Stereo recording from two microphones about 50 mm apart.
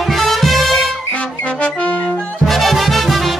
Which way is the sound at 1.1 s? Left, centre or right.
Left.